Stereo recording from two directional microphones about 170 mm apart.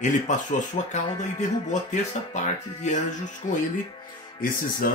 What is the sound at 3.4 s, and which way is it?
Speech, 50° left (ahead or behind).